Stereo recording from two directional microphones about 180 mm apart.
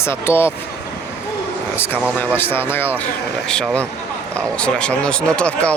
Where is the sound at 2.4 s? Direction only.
10° left (ahead or behind).